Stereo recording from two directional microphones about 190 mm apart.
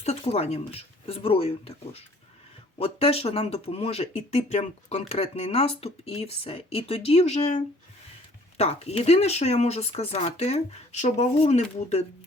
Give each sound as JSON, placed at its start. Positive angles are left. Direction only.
{"t": 0.0, "sound": "speech", "side_deg": 35}